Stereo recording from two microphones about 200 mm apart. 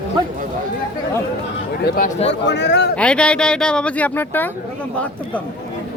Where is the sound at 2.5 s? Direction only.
60° left (ahead or behind).